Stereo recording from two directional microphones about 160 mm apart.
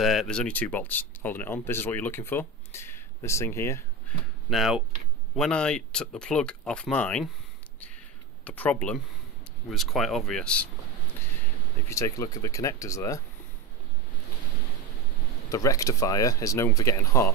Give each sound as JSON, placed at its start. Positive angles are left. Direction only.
{"t": 0.0, "sound": "speech", "side_deg": 0}
{"t": 4.5, "sound": "speech", "side_deg": 0}
{"t": 8.5, "sound": "speech", "side_deg": 10}
{"t": 11.9, "sound": "speech", "side_deg": 20}
{"t": 15.5, "sound": "speech", "side_deg": 20}